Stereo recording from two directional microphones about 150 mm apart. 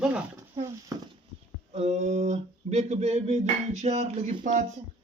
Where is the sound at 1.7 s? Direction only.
50° right (ahead or behind).